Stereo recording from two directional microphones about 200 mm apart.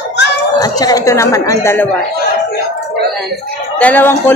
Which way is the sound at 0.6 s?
20° left (ahead or behind).